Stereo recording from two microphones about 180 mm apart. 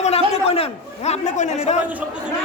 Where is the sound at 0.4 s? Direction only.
35° left (ahead or behind).